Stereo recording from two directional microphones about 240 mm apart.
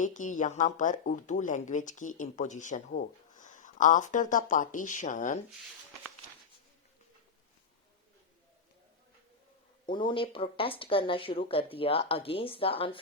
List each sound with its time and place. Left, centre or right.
0.0 s speech: left
9.8 s speech: centre